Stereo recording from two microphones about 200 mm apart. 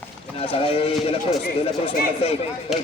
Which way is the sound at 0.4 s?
30° left (ahead or behind).